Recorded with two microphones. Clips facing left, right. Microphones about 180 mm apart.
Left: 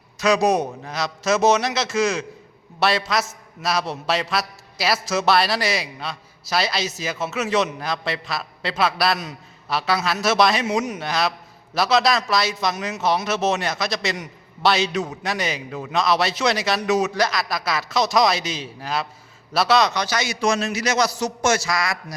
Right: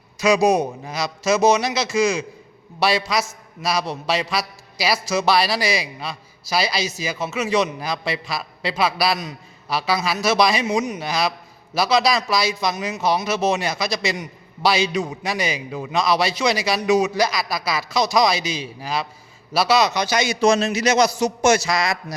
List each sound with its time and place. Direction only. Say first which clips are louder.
0.2 s a man's voice: right 2 dB; centre (ahead or behind); by 21.9 s 20° right (ahead or behind)